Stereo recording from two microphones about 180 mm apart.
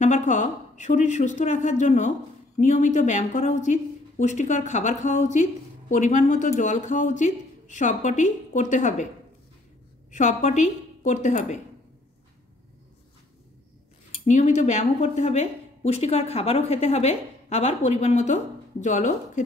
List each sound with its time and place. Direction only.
0.0 s a woman's voice: 45° left (ahead or behind)
10.1 s a woman's voice: 40° left (ahead or behind)
14.1 s a woman's voice: 40° left (ahead or behind)